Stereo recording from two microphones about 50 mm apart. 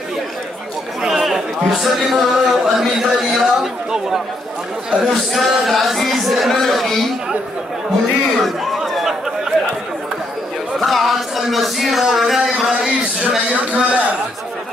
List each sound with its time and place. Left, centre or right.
1.0 s a man's voice: centre
5.0 s speech: centre
8.4 s chatter: centre
10.8 s speech: centre
12.5 s a sound: centre
13.5 s a man's voice: right